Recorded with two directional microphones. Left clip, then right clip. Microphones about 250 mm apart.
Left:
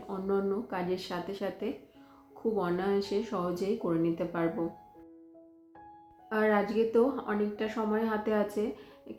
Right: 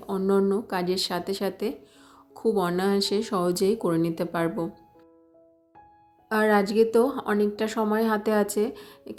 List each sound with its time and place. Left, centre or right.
0.1 s speech: right
6.2 s speech: right